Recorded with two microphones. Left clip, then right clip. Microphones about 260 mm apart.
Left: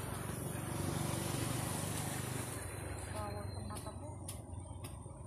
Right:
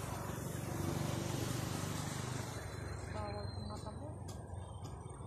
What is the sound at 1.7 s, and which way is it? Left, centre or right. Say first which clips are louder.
Vehicle: left 1 dB; centre.